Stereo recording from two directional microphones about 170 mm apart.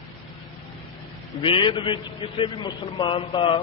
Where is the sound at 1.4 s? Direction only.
30° left (ahead or behind).